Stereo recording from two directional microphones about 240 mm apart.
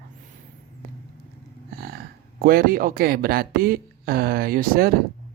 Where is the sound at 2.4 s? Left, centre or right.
Right.